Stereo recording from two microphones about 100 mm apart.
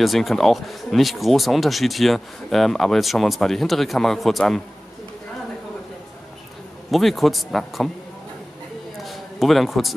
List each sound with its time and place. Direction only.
0.0 s speech: centre (ahead or behind)
6.9 s speech: centre (ahead or behind)
9.0 s a sound: centre (ahead or behind)